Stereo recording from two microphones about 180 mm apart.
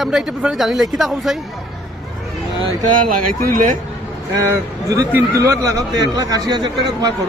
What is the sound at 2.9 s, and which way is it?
Speech, 50° right (ahead or behind).